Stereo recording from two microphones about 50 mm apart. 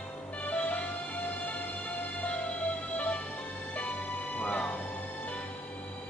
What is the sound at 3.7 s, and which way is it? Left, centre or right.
Music, left.